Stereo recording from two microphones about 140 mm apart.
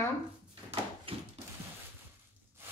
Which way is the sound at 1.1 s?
40° right (ahead or behind).